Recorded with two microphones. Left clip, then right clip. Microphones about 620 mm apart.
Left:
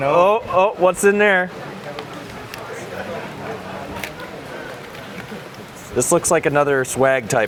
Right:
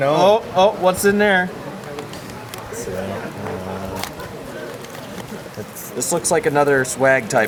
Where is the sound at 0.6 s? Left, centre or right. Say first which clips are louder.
Even; left.